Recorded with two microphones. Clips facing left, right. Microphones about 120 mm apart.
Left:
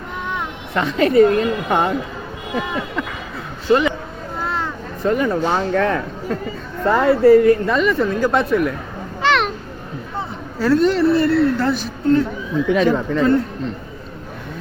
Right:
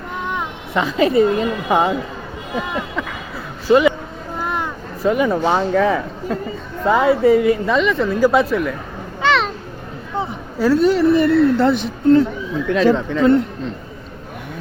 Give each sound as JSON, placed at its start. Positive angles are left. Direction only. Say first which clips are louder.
{"t": 0.7, "sound": "a man's voice", "louder": "even", "side_deg": 0}
{"t": 4.4, "sound": "a sound", "louder": "right 1 dB", "side_deg": -15}
{"t": 5.0, "sound": "a man's voice", "louder": "right 2 dB", "side_deg": -5}
{"t": 9.2, "sound": "children playing", "louder": "even", "side_deg": 0}
{"t": 10.2, "sound": "a woman's voice", "louder": "right 4 dB", "side_deg": -5}
{"t": 12.6, "sound": "a man's voice", "louder": "right 2 dB", "side_deg": 5}